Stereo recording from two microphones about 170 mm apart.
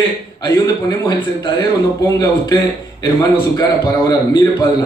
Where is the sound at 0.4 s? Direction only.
25° left (ahead or behind).